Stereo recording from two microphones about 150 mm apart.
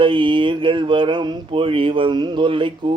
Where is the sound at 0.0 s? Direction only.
35° right (ahead or behind).